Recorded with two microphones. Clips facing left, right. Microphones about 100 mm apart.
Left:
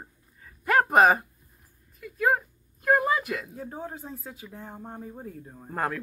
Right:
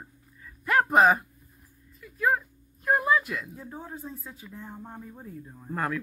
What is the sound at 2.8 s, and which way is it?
Speech, 65° left (ahead or behind).